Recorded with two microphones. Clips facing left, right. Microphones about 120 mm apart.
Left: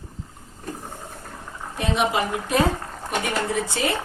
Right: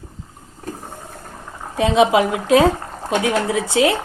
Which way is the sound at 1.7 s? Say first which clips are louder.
Right 9 dB; 90° right.